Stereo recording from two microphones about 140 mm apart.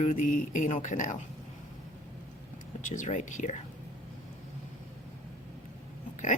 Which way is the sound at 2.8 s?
65° left (ahead or behind).